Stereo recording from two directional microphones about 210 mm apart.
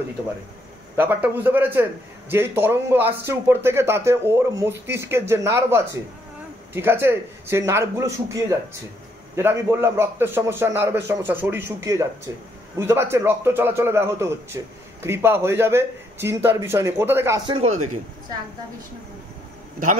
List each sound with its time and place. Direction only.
0.9 s a man's voice: 10° right (ahead or behind)
17.5 s speech: 30° right (ahead or behind)